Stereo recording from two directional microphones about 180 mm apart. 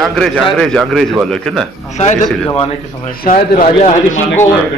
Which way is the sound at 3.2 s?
55° left (ahead or behind).